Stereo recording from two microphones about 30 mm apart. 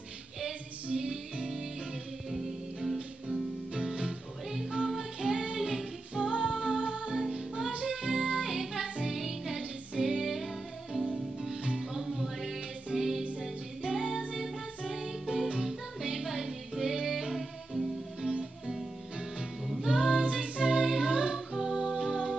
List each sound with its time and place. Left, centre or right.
0.9 s music: centre
2.3 s music: centre
3.7 s music: centre
6.3 s music: right
7.3 s music: centre
8.4 s music: centre
19.8 s music: centre
20.1 s music: right
20.8 s music: centre
21.3 s music: centre